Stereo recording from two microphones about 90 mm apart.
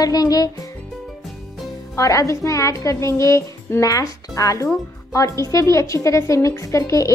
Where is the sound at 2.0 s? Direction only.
35° left (ahead or behind).